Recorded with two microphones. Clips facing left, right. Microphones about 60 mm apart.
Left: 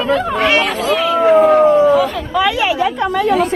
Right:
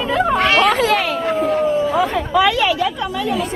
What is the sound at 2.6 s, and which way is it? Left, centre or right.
Speech, left.